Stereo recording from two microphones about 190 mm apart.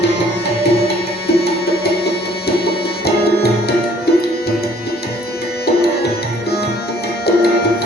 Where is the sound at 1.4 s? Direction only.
60° left (ahead or behind).